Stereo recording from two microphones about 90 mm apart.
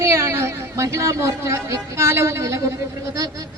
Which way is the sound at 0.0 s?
30° right (ahead or behind).